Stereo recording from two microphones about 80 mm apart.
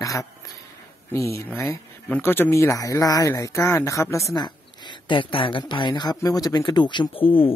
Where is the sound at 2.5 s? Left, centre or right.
Left.